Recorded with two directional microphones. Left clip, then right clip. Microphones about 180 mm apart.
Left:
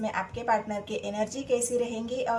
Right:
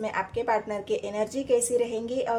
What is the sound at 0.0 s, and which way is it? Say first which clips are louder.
A woman's voice: right 2 dB; 35° right (ahead or behind).